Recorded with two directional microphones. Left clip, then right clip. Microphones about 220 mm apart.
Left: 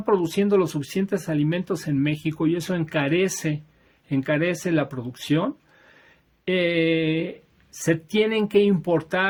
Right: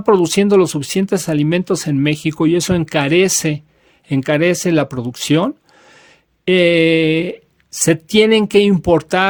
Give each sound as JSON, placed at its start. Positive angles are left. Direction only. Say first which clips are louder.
{"t": 0.0, "sound": "speech", "louder": "right 9 dB", "side_deg": -45}